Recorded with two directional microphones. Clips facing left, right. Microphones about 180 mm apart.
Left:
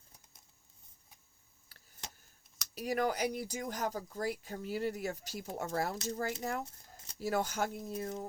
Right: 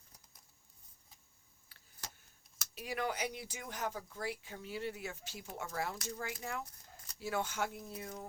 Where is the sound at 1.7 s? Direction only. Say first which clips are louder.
Left 4 dB; 40° left (ahead or behind).